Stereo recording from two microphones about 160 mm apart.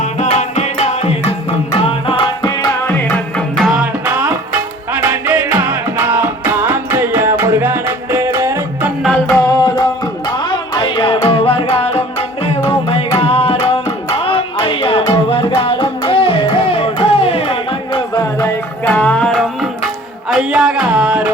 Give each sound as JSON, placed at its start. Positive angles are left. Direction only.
{"t": 0.0, "sound": "music", "side_deg": 45}
{"t": 2.8, "sound": "music", "side_deg": 15}
{"t": 9.3, "sound": "tabla", "side_deg": 20}
{"t": 11.7, "sound": "music", "side_deg": 40}
{"t": 20.3, "sound": "a sound", "side_deg": -5}